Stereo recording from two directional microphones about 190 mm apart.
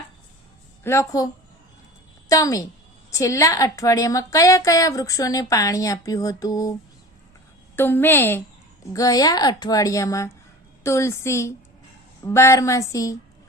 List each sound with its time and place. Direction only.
0.9 s a woman's voice: 15° left (ahead or behind)
2.3 s a woman's voice: 15° left (ahead or behind)
7.8 s a woman's voice: 10° left (ahead or behind)